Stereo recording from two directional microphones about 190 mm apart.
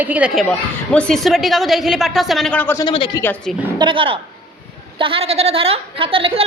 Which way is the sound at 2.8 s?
25° left (ahead or behind).